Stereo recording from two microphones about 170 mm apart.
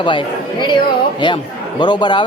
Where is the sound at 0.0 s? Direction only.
30° left (ahead or behind).